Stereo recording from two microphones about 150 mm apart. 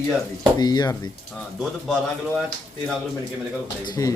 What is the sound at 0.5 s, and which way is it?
Speech, 25° left (ahead or behind).